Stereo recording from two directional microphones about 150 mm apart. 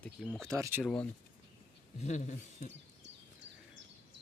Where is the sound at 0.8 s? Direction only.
10° left (ahead or behind).